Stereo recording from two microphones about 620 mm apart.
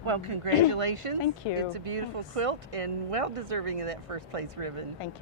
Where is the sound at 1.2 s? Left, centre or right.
Left.